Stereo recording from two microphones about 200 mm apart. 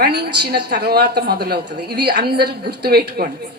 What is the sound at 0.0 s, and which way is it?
A woman's voice, 55° right (ahead or behind).